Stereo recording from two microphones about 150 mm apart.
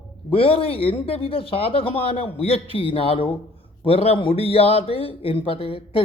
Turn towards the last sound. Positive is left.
turn(degrees=40)  # may be behind; listen again after turning